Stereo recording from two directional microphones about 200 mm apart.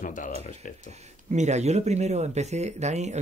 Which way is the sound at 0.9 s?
35° right (ahead or behind).